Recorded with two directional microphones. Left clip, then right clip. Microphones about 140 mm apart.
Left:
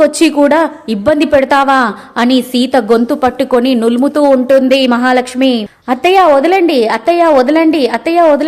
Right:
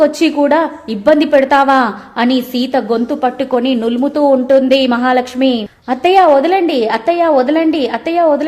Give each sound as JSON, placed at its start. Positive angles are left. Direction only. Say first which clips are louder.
{"t": 0.0, "sound": "a woman's voice", "louder": "left 3 dB", "side_deg": 35}